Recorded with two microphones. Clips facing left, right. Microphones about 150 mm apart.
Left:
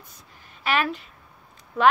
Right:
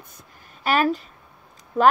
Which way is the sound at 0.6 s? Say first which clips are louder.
Right 4 dB; 40° right (ahead or behind).